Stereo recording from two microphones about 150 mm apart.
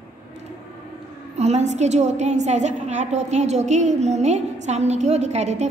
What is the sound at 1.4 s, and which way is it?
A woman's voice, 45° right (ahead or behind).